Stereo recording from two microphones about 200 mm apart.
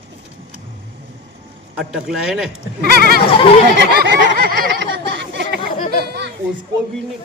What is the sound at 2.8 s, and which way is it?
Speech, 50° right (ahead or behind).